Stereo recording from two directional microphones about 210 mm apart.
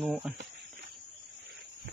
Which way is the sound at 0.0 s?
5° right (ahead or behind).